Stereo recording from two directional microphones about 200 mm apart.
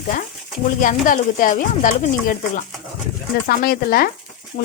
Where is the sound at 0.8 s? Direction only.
40° left (ahead or behind).